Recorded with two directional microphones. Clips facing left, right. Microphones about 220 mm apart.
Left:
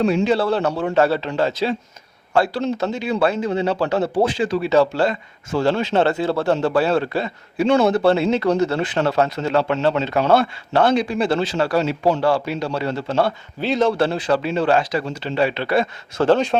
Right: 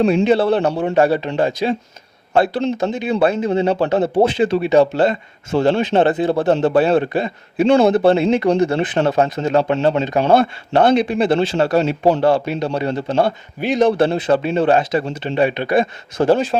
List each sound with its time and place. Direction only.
0.2 s a man's voice: 20° right (ahead or behind)